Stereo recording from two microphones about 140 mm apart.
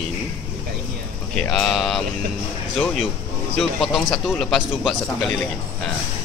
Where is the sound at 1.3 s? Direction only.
5° left (ahead or behind).